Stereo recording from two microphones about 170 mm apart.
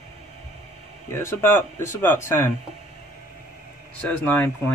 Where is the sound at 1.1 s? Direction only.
15° left (ahead or behind).